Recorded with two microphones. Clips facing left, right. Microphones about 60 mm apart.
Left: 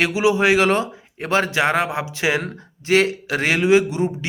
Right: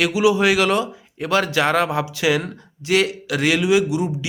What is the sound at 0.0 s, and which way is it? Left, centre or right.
A man's voice, left.